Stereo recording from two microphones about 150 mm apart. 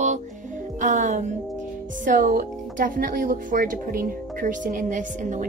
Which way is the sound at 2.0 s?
65° right (ahead or behind).